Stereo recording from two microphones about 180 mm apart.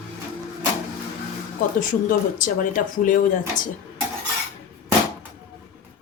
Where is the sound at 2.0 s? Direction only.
45° left (ahead or behind).